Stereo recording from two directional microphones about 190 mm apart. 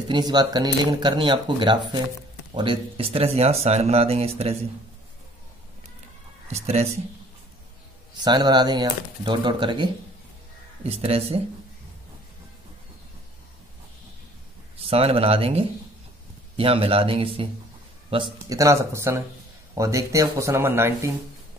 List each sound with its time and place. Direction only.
0.1 s speech: 20° right (ahead or behind)
6.5 s speech: 35° right (ahead or behind)
8.2 s speech: 20° right (ahead or behind)
14.8 s speech: 30° right (ahead or behind); by 21.1 s 10° right (ahead or behind)